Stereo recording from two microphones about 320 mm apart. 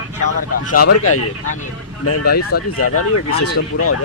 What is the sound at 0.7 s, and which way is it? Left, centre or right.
Speech, left.